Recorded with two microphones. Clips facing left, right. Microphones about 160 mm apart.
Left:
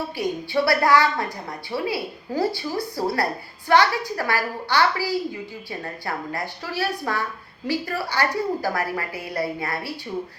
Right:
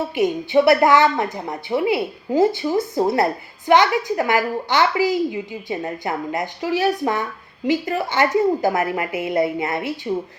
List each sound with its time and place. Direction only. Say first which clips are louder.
0.2 s a woman's voice: right 7 dB; 20° right (ahead or behind)